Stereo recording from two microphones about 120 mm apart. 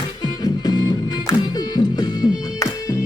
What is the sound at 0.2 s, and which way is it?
Music, 35° left (ahead or behind).